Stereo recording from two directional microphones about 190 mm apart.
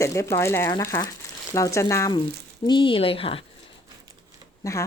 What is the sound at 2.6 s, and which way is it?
Speech, 25° left (ahead or behind).